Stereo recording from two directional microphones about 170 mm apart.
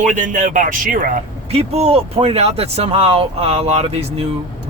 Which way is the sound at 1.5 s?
35° right (ahead or behind).